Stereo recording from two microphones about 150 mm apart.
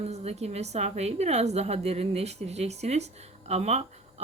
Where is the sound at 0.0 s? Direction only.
45° right (ahead or behind).